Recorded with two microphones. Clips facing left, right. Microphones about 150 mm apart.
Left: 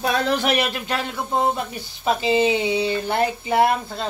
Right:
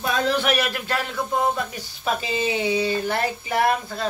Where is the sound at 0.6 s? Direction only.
20° left (ahead or behind).